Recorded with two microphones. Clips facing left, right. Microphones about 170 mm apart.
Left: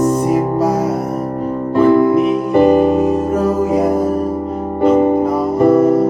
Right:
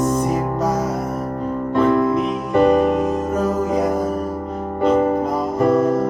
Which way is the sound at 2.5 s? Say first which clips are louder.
Left 3 dB; 30° left (ahead or behind).